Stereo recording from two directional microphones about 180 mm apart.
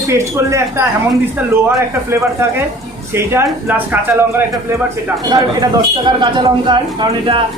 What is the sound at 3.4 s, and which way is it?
Speech, 10° right (ahead or behind).